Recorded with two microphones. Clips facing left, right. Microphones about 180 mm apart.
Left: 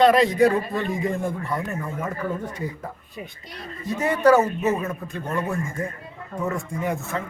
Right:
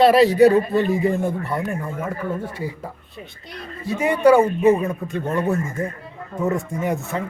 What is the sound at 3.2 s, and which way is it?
Speech, 10° left (ahead or behind).